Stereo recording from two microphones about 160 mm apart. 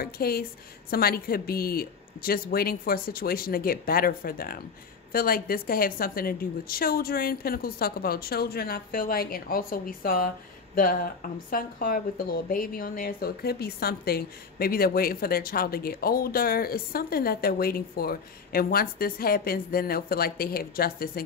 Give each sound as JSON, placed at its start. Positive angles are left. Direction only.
{"t": 0.0, "sound": "a woman's voice", "side_deg": 70}